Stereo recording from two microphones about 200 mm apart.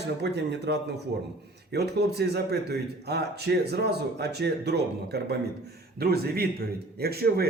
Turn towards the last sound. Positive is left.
turn(degrees=-50)  # may be behind; listen again after turning